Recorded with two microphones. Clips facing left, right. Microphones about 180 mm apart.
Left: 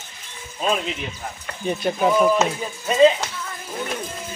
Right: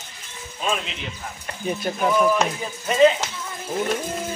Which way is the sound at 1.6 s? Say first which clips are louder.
Left 3 dB; centre (ahead or behind).